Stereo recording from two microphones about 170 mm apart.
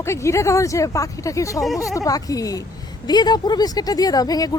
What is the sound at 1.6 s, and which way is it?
Speech, centre (ahead or behind).